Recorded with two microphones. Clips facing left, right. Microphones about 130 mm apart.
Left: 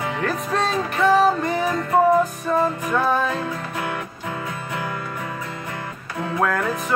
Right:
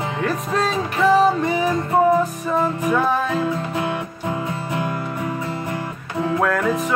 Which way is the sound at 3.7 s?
20° right (ahead or behind).